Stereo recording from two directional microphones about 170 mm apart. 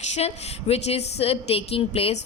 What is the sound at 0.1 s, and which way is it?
A woman's voice, 40° left (ahead or behind).